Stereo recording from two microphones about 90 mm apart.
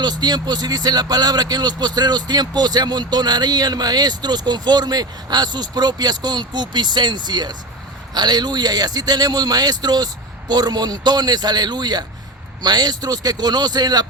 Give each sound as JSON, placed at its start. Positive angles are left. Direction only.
{"t": 0.0, "sound": "speech", "side_deg": -50}